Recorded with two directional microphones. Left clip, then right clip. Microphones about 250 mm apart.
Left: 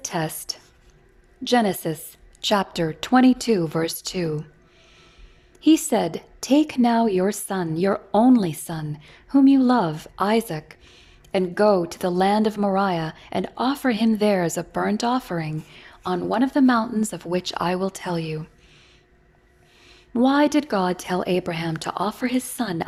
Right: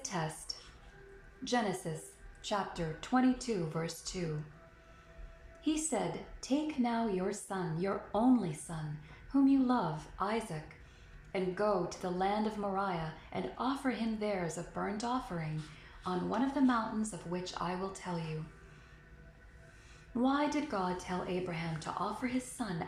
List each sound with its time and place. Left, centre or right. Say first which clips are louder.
0.0 s a woman's voice: left 11 dB; left
5.6 s speech: left 16 dB; left
19.9 s speech: left 13 dB; left